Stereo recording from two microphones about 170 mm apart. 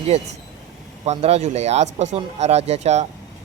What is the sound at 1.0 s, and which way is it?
Speech, 40° right (ahead or behind).